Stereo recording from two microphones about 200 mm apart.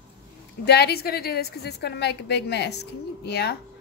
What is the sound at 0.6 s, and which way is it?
A woman's voice, 55° left (ahead or behind).